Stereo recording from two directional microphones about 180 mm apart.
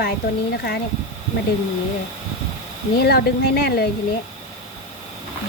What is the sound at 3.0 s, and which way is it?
Speech, 65° left (ahead or behind).